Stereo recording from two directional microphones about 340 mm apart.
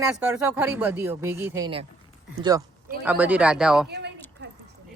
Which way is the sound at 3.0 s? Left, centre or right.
Centre.